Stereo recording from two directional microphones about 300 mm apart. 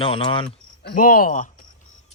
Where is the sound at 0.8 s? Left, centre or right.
Left.